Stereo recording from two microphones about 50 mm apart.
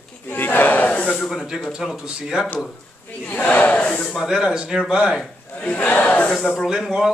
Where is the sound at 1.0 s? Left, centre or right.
Centre.